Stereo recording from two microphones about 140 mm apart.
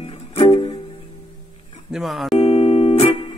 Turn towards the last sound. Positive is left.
turn(degrees=45)  # may be behind; listen again after turning